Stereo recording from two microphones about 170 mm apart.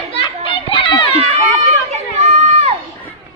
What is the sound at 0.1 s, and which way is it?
Children playing, 30° left (ahead or behind).